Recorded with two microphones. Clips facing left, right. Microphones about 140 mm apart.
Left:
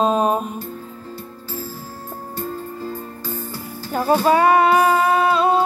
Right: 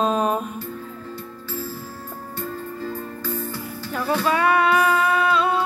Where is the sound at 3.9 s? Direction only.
40° left (ahead or behind).